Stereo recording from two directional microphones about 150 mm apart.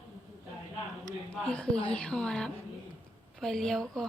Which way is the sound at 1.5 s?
10° left (ahead or behind).